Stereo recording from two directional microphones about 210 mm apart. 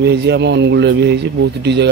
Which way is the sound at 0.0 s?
50° right (ahead or behind).